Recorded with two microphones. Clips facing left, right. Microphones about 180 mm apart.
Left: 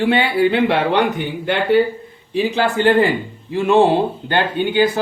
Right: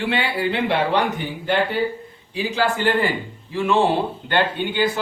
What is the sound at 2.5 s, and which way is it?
Speech, 55° left (ahead or behind).